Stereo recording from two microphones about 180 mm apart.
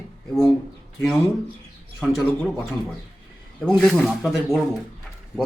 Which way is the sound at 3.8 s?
Centre (ahead or behind).